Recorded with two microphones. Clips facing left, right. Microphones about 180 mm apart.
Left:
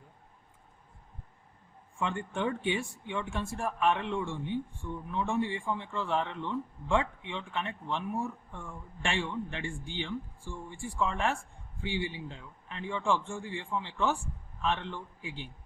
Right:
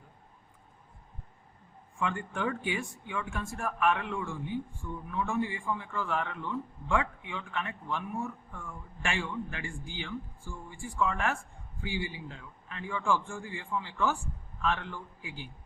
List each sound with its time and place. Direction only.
2.0 s speech: 25° left (ahead or behind)